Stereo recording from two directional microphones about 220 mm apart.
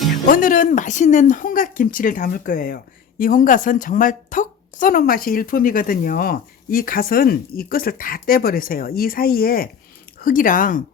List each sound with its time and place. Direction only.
0.3 s speech: 40° left (ahead or behind)